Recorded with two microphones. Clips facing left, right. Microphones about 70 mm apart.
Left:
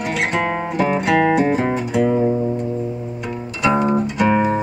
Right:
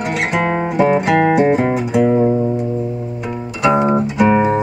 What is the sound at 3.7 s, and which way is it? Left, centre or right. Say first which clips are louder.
Music: right 3 dB; centre.